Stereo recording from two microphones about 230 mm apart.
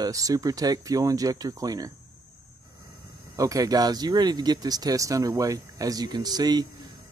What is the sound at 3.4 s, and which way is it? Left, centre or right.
Speech, centre.